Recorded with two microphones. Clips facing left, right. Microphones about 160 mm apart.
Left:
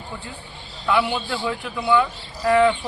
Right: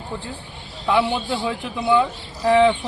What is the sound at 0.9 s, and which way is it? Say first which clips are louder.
Speech: right 2 dB; 25° right (ahead or behind).